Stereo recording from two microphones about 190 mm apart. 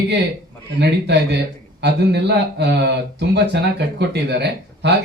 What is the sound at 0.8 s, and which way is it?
Speech, 60° right (ahead or behind).